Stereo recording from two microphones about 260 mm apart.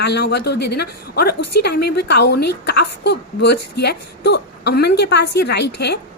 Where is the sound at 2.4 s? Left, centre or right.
Left.